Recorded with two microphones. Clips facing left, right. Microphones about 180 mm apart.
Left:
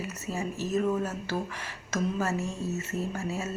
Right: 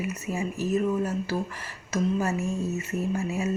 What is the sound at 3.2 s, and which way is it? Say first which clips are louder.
Speech: right 4 dB; 15° right (ahead or behind).